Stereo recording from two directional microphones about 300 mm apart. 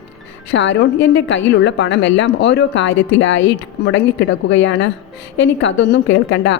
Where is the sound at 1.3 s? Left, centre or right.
Left.